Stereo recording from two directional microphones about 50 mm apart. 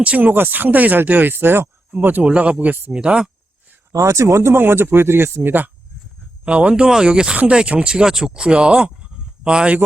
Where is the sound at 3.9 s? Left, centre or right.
Right.